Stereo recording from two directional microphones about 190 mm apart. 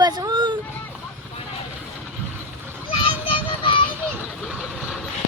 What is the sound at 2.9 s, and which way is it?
Child singing, 25° left (ahead or behind).